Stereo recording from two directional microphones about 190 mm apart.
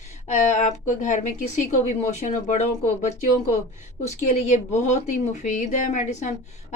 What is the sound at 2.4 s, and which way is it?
Speech, 40° left (ahead or behind).